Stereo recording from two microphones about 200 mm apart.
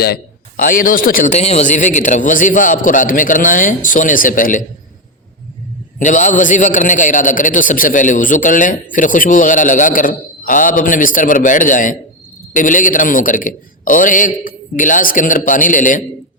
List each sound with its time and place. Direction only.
0.0 s a man's voice: 45° left (ahead or behind)
6.0 s a man's voice: 40° left (ahead or behind)